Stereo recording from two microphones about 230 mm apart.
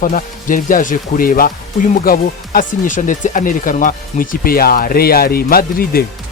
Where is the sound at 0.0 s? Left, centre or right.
Left.